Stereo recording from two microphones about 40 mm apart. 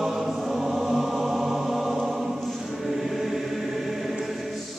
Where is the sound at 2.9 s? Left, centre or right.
Centre.